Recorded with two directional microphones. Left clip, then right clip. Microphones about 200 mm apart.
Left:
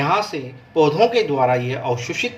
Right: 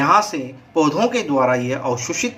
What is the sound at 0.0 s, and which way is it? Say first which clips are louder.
Speech: right 4 dB; 25° right (ahead or behind).